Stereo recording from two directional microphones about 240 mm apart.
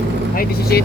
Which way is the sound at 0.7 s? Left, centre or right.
Left.